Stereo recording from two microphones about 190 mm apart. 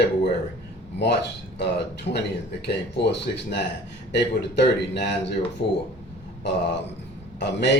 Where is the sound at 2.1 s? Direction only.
65° left (ahead or behind).